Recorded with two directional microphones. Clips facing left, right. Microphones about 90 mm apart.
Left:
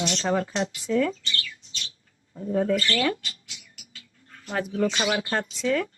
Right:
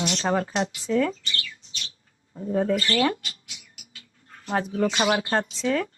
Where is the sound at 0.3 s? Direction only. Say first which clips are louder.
Right 1 dB; 35° right (ahead or behind).